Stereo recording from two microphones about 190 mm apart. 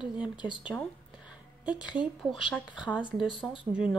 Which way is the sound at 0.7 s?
5° right (ahead or behind).